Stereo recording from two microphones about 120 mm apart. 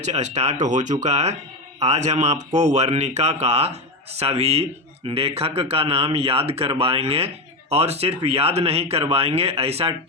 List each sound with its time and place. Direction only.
0.0 s speech: 70° right (ahead or behind); by 0.9 s 90° right
1.0 s speech: 70° right (ahead or behind)